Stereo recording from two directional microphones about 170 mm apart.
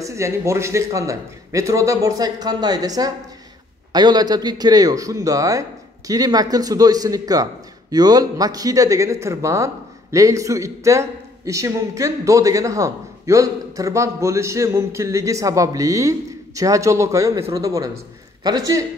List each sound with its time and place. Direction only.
0.0 s a man's voice: 15° right (ahead or behind)